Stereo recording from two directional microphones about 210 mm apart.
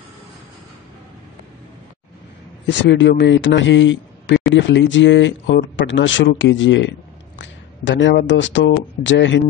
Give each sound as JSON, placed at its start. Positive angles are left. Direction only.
{"t": 2.6, "sound": "a man's voice", "side_deg": 55}